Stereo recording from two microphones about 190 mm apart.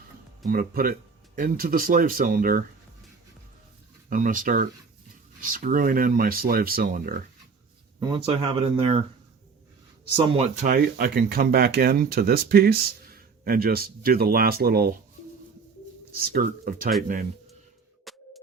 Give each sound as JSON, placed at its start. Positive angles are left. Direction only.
{"t": 0.4, "sound": "speech", "side_deg": -50}
{"t": 4.1, "sound": "speech", "side_deg": -45}
{"t": 7.9, "sound": "speech", "side_deg": -20}
{"t": 10.2, "sound": "speech", "side_deg": -35}
{"t": 10.8, "sound": "speech", "side_deg": -50}
{"t": 16.2, "sound": "speech", "side_deg": -50}
{"t": 18.1, "sound": "music", "side_deg": 0}